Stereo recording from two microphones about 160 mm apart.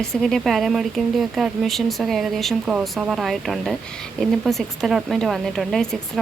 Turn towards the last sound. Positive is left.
turn(degrees=5)  # may be behind; listen again after turning